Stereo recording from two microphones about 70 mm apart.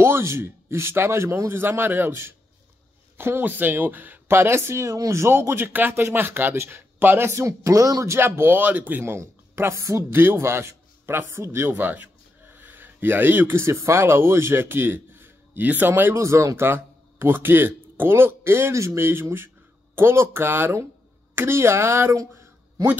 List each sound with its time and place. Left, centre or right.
0.0 s speech: right
9.0 s a man's voice: right
11.7 s speech: right
16.6 s speech: right